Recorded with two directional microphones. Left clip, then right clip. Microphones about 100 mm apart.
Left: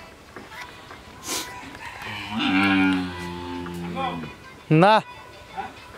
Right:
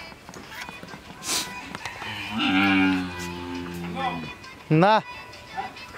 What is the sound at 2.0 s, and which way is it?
Cattle, 10° left (ahead or behind).